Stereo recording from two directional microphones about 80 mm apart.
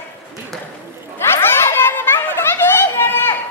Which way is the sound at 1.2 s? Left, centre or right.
Left.